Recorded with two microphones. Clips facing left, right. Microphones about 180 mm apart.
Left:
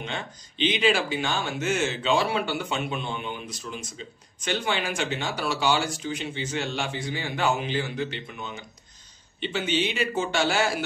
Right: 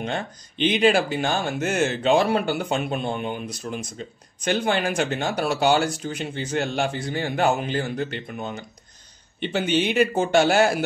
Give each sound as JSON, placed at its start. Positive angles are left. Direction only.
{"t": 0.0, "sound": "speech", "side_deg": -50}